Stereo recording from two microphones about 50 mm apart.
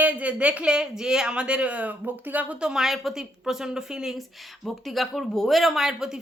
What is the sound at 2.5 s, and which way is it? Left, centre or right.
Speech, centre.